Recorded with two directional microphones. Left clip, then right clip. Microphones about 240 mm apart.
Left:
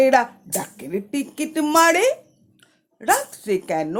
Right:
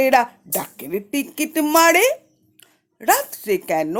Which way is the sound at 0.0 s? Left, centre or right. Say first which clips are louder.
Even; right.